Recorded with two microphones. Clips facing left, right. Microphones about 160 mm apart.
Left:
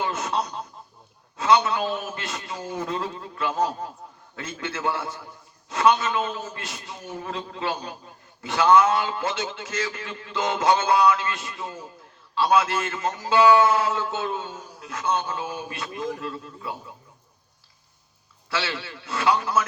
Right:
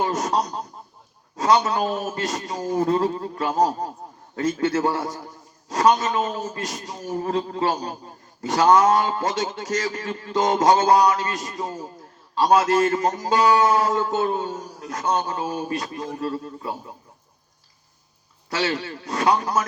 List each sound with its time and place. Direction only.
0.0 s a man's voice: 40° right (ahead or behind)
18.5 s a man's voice: 40° right (ahead or behind)